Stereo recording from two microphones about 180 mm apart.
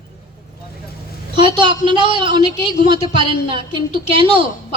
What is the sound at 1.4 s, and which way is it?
A woman's voice, 25° right (ahead or behind).